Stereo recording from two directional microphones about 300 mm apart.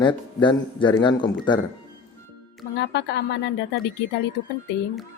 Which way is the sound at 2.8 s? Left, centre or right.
Left.